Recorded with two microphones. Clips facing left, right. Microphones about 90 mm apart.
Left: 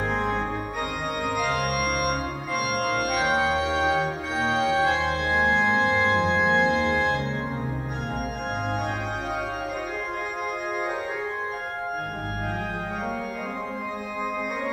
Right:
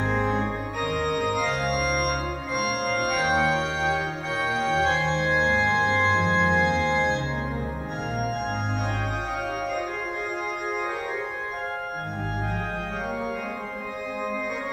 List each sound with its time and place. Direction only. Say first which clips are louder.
0.1 s organ: right 1 dB; centre (ahead or behind)
3.0 s organ: right 2 dB; centre (ahead or behind)
5.0 s organ: right 1 dB; 45° left (ahead or behind)
5.3 s organ: left 2 dB; 5° left (ahead or behind)